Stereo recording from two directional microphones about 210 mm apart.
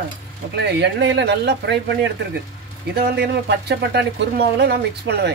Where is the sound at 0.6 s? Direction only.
55° right (ahead or behind).